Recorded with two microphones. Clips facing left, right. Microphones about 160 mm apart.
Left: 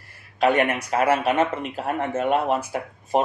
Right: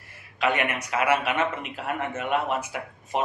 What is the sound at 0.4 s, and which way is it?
Speech, 35° left (ahead or behind).